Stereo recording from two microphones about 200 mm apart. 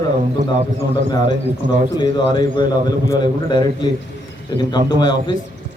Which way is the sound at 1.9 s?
20° left (ahead or behind).